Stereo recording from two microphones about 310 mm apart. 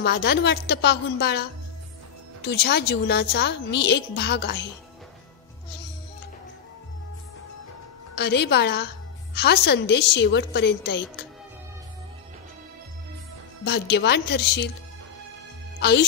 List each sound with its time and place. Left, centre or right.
0.0 s a woman's voice: left
8.1 s a woman's voice: left
13.7 s a woman's voice: left